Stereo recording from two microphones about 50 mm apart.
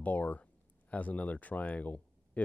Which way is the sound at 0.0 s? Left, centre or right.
Left.